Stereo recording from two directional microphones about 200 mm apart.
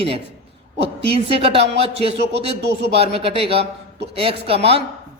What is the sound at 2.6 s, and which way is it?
Speech, 60° right (ahead or behind).